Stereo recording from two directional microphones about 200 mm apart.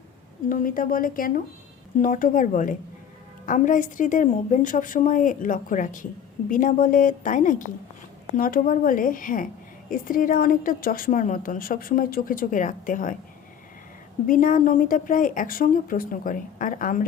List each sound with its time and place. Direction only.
0.4 s a woman's voice: 45° left (ahead or behind)
14.3 s a woman's voice: 40° left (ahead or behind)